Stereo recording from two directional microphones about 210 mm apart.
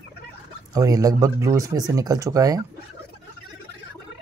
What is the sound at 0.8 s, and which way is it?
Speech, 15° right (ahead or behind).